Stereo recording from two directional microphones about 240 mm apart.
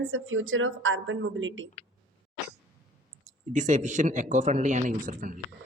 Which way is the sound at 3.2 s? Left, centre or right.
Right.